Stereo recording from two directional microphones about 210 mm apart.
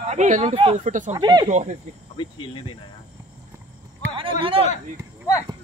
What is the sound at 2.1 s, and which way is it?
Speech, 25° left (ahead or behind).